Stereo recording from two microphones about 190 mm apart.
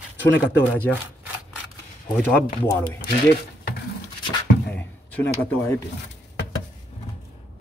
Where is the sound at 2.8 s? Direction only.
55° left (ahead or behind).